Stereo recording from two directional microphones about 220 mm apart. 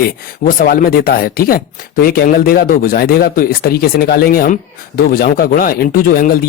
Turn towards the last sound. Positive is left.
turn(degrees=40)  # may be behind; listen again after turning